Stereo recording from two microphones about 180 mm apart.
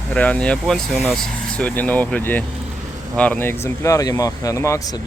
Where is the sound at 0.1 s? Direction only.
10° left (ahead or behind).